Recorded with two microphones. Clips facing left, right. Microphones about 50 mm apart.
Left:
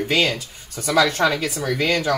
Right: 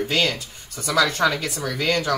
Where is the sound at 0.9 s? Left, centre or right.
Left.